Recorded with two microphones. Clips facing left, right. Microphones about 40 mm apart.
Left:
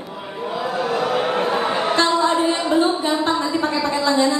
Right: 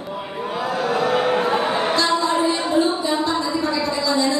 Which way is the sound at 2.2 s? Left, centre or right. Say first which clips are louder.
Left 1 dB; left.